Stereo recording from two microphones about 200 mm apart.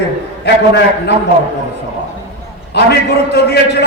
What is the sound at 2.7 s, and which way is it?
A man's voice, 55° left (ahead or behind).